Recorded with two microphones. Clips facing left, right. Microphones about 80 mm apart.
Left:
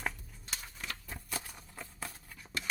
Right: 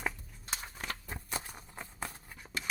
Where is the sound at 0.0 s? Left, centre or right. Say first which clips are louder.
Right 1 dB; centre.